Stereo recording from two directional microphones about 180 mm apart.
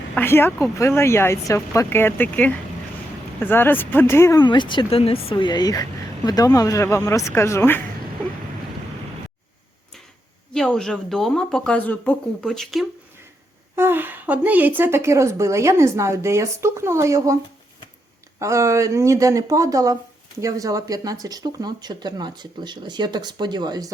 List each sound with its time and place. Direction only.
0.1 s speech: 10° left (ahead or behind)
10.5 s speech: 5° left (ahead or behind)
13.7 s a woman's voice: 10° right (ahead or behind)
18.3 s a woman's voice: 15° right (ahead or behind)